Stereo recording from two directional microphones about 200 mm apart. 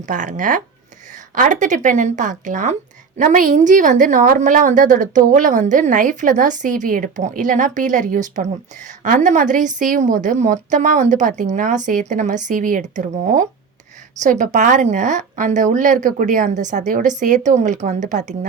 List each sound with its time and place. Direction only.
0.0 s a woman's voice: 40° right (ahead or behind)